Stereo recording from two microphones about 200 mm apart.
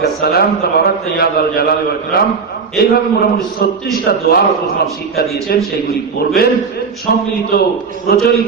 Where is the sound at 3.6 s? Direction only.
50° left (ahead or behind).